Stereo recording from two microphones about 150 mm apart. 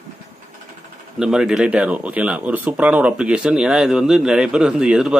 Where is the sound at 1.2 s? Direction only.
5° right (ahead or behind).